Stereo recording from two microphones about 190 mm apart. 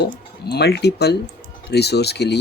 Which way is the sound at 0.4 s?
60° left (ahead or behind).